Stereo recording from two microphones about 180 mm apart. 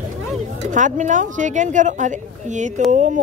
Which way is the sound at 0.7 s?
45° right (ahead or behind).